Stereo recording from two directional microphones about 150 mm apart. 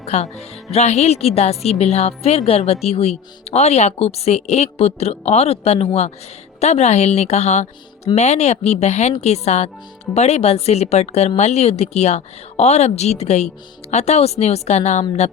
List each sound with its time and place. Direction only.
0.0 s a woman's voice: 45° left (ahead or behind)